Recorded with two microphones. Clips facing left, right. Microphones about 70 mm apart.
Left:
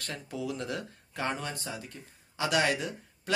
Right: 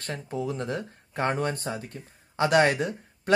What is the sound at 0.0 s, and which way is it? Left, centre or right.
Speech, right.